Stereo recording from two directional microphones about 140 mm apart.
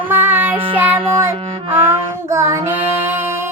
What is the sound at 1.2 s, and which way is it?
Music, 15° right (ahead or behind).